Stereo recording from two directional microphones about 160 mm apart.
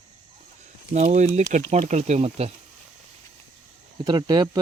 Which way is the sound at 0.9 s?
45° right (ahead or behind).